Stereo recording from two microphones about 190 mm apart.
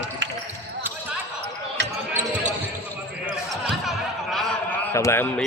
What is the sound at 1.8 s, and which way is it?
Basketball bounce, 65° right (ahead or behind).